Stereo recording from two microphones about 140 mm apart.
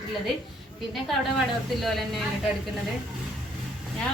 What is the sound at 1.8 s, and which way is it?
Speech, centre (ahead or behind).